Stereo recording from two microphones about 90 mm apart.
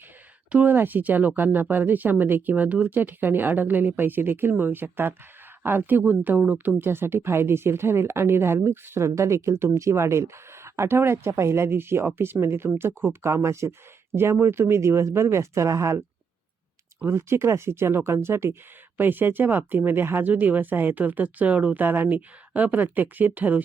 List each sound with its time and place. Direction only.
0.5 s speech: 20° right (ahead or behind)
17.1 s speech: 30° right (ahead or behind)